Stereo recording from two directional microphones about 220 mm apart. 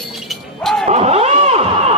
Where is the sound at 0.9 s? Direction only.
30° right (ahead or behind).